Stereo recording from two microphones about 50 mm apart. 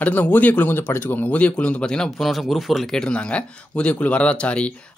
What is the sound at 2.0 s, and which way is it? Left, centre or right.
Speech, centre.